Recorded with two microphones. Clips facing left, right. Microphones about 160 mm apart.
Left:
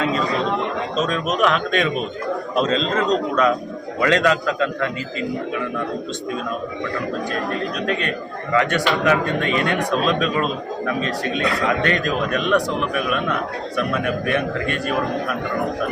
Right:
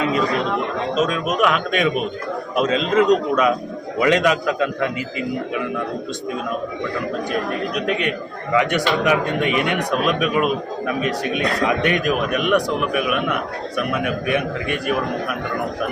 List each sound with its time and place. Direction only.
0.9 s a man's voice: 10° right (ahead or behind)
7.8 s a man's voice: 15° right (ahead or behind)